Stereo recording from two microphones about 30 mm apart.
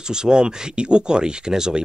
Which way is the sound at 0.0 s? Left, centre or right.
Right.